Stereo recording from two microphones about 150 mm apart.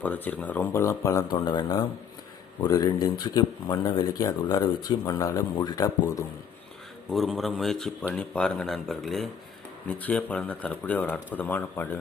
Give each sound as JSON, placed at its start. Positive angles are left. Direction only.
{"t": 0.0, "sound": "speech", "side_deg": 10}
{"t": 7.1, "sound": "speech", "side_deg": 0}